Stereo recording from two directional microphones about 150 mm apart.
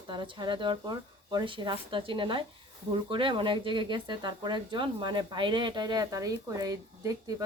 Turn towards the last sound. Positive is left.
turn(degrees=-25)  # may be behind; listen again after turning